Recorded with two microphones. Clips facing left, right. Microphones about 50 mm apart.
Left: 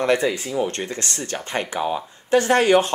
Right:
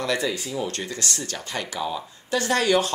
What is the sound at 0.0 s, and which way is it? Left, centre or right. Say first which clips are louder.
Speech: left 6 dB; left.